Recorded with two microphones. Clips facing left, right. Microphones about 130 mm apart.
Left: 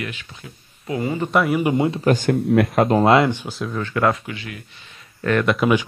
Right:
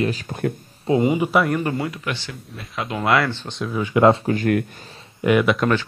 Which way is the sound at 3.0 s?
25° left (ahead or behind).